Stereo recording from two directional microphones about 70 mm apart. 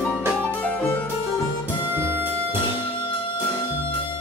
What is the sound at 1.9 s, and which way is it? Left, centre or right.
Music, right.